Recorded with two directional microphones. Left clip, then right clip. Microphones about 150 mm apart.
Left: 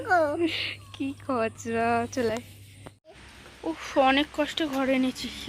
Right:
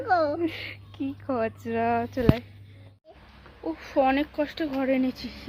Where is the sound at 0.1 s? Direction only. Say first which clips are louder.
Even; 20° right (ahead or behind).